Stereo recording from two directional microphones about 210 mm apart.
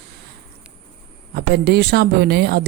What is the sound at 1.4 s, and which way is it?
A woman's voice, 50° right (ahead or behind).